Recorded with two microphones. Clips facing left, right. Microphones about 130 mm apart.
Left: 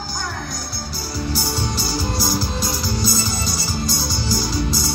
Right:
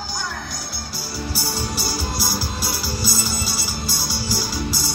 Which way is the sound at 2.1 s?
10° right (ahead or behind).